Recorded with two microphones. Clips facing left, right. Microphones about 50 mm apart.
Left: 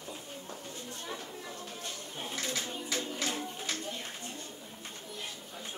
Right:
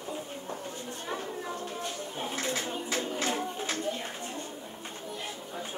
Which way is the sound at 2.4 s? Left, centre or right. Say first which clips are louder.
Right 3 dB; right.